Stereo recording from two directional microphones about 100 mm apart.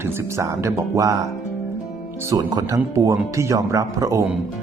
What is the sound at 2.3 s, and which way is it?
Speech, 35° right (ahead or behind).